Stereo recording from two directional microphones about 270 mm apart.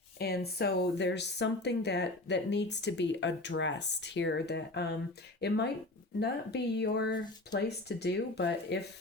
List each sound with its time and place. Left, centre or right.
0.2 s speech: left